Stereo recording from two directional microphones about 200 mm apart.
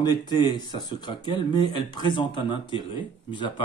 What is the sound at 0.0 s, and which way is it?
Speech, 20° left (ahead or behind).